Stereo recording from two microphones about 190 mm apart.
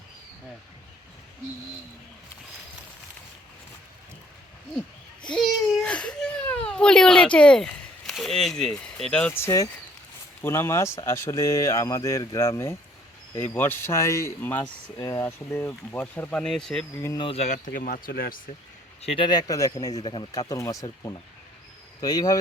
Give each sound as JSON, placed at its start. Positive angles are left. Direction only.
{"t": 5.2, "sound": "a sound", "side_deg": 5}
{"t": 8.8, "sound": "speech", "side_deg": 5}
{"t": 17.2, "sound": "speech", "side_deg": 30}
{"t": 17.7, "sound": "speech", "side_deg": 50}
{"t": 19.0, "sound": "speech", "side_deg": 25}